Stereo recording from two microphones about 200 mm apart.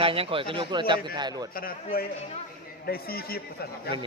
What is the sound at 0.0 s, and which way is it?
A man's voice, 30° right (ahead or behind).